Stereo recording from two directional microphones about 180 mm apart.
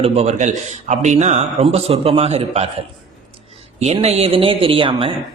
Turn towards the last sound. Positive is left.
turn(degrees=-30)  # may be behind; listen again after turning